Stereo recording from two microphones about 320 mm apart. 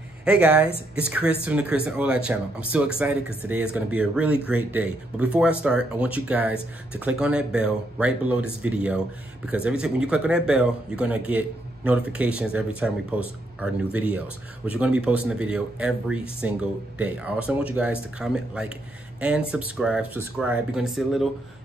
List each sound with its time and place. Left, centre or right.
0.2 s speech: centre